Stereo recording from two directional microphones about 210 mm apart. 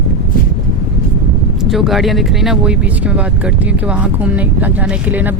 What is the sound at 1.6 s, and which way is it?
Speech, centre (ahead or behind).